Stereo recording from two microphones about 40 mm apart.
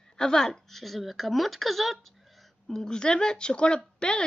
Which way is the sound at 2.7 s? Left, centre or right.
Centre.